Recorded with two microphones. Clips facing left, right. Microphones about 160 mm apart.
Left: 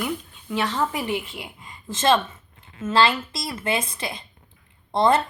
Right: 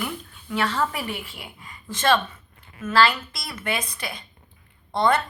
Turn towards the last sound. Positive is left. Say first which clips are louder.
# left 2 dB
turn(degrees=25)  # may be behind; listen again after turning